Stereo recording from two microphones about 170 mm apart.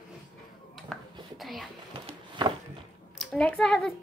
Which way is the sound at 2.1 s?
25° right (ahead or behind).